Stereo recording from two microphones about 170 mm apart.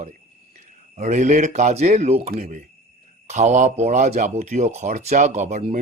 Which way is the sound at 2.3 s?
50° right (ahead or behind).